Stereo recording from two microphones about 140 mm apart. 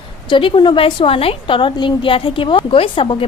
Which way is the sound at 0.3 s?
35° left (ahead or behind).